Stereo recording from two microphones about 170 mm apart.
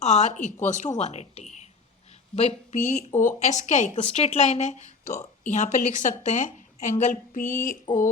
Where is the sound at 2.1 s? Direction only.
35° left (ahead or behind).